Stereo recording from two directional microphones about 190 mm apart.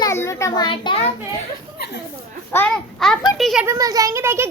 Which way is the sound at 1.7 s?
60° left (ahead or behind).